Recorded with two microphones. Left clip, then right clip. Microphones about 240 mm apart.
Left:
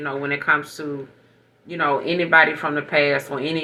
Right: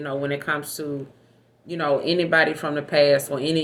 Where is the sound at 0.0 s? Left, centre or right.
Right.